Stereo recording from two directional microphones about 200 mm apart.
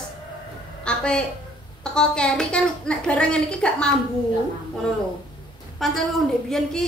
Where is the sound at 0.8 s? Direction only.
5° left (ahead or behind).